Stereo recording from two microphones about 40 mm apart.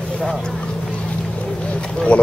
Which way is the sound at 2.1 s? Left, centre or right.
Left.